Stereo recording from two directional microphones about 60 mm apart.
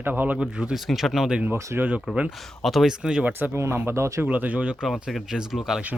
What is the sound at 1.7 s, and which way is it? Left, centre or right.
Speech, right.